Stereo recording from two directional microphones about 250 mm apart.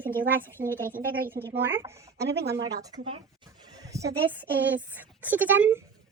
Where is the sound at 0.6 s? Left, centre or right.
Right.